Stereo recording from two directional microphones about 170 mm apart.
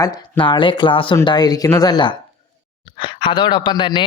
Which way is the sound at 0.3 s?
30° left (ahead or behind).